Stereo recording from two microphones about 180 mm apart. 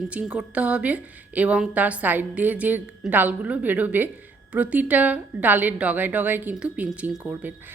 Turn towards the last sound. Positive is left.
turn(degrees=-10)  # may be behind; listen again after turning